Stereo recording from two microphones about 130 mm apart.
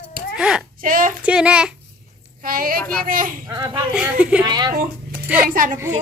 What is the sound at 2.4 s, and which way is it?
Speech, 90° right.